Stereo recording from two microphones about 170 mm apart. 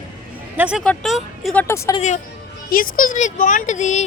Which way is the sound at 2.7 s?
55° left (ahead or behind).